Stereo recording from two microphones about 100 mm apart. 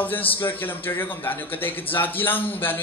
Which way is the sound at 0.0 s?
20° left (ahead or behind).